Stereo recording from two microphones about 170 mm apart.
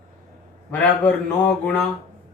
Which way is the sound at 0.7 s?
10° left (ahead or behind).